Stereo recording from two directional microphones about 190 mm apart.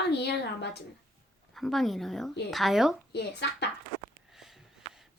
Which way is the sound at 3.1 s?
60° left (ahead or behind).